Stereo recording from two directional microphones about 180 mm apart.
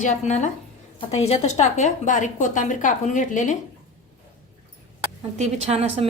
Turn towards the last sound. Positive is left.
turn(degrees=-35)  # may be behind; listen again after turning